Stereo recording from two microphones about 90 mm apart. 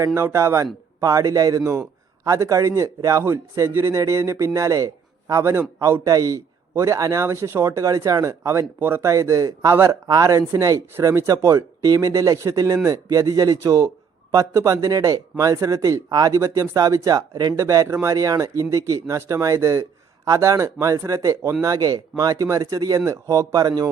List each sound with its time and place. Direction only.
0.0 s a man's voice: 30° right (ahead or behind); by 17.5 s 45° right (ahead or behind)
17.6 s speech: 35° right (ahead or behind)